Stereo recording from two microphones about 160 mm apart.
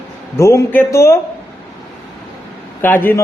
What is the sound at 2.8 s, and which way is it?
Speech, 15° left (ahead or behind).